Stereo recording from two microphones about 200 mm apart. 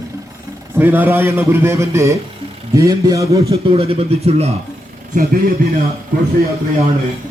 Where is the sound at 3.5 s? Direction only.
30° right (ahead or behind).